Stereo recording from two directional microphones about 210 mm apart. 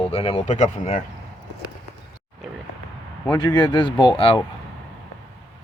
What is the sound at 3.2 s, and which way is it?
Speech, 20° left (ahead or behind).